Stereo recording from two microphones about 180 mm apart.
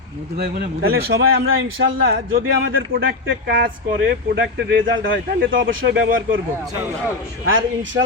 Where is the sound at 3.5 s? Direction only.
60° right (ahead or behind); by 6.1 s 90° right.